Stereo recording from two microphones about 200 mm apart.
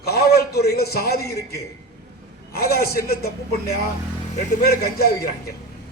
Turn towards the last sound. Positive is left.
turn(degrees=50)  # may be behind; listen again after turning